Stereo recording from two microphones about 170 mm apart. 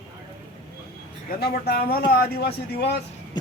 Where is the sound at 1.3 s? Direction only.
70° left (ahead or behind).